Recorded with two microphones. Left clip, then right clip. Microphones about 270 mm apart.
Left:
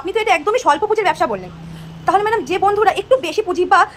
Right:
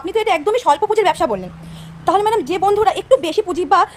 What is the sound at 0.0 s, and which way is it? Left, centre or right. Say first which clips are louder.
A woman's voice: left 1 dB; right.